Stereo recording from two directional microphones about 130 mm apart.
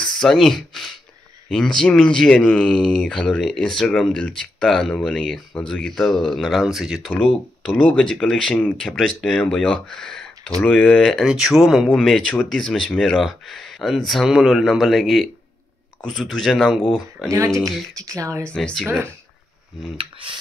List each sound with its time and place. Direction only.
0.0 s a sound: 5° left (ahead or behind)
1.5 s speech: 5° left (ahead or behind)
17.9 s speech: 25° right (ahead or behind)
18.5 s speech: 5° left (ahead or behind)
20.0 s speech: 40° right (ahead or behind)